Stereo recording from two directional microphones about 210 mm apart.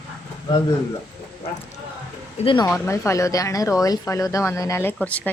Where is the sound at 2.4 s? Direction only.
20° left (ahead or behind).